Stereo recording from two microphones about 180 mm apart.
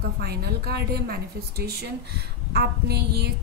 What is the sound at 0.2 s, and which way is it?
A woman's voice, 60° right (ahead or behind).